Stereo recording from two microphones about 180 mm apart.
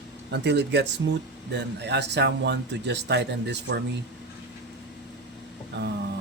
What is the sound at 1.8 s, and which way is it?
Speech, 70° right (ahead or behind).